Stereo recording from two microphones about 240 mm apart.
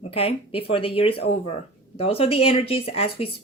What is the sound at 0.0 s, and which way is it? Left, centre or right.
Speech, left.